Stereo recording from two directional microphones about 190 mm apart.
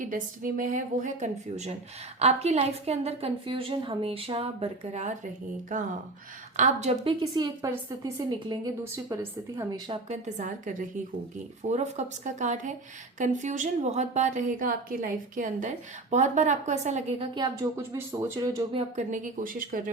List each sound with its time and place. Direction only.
0.0 s a woman's voice: 45° right (ahead or behind); by 10.0 s 15° right (ahead or behind)
10.1 s a woman's voice: 40° right (ahead or behind)
17.3 s speech: 20° right (ahead or behind)
18.7 s a woman's voice: 35° right (ahead or behind)